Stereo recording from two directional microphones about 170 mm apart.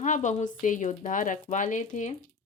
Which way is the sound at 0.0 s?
45° left (ahead or behind).